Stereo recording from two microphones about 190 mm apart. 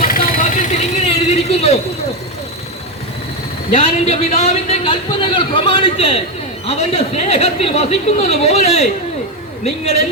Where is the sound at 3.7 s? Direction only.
35° left (ahead or behind).